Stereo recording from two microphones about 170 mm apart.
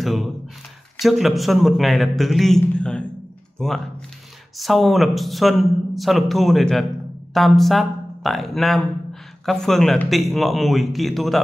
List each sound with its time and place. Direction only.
0.0 s speech: centre (ahead or behind)